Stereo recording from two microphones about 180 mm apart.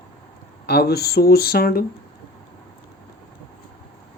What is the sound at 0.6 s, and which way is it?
Speech, 60° left (ahead or behind).